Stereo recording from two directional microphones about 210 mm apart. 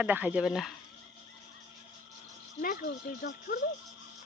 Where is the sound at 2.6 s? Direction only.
40° left (ahead or behind).